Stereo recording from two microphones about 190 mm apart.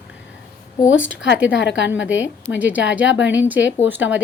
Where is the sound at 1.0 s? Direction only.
75° left (ahead or behind).